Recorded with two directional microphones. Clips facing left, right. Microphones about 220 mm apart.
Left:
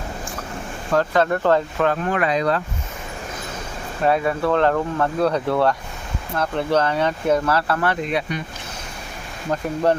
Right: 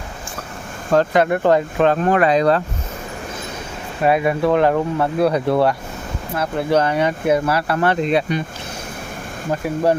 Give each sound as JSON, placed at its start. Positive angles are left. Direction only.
{"t": 0.9, "sound": "speech", "side_deg": -15}
{"t": 1.9, "sound": "speech", "side_deg": -35}
{"t": 4.0, "sound": "speech", "side_deg": -15}
{"t": 7.8, "sound": "speech", "side_deg": -30}
{"t": 9.5, "sound": "speech", "side_deg": -10}